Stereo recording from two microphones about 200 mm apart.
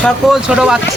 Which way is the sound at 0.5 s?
5° right (ahead or behind).